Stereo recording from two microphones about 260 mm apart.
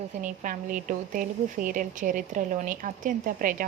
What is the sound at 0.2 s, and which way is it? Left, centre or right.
A woman's voice, right.